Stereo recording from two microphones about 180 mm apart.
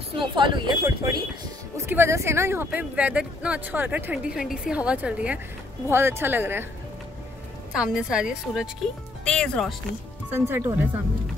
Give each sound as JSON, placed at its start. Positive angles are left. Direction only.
{"t": 0.1, "sound": "speech", "side_deg": -25}
{"t": 7.7, "sound": "a woman's voice", "side_deg": -5}
{"t": 10.3, "sound": "speech", "side_deg": -15}